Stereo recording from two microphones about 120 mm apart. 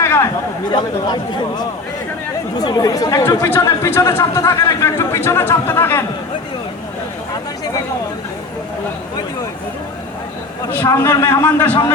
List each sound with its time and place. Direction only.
0.0 s chatter: 20° left (ahead or behind)
0.7 s speech: 40° left (ahead or behind); by 6.1 s 20° left (ahead or behind)
10.7 s a man's voice: 20° left (ahead or behind)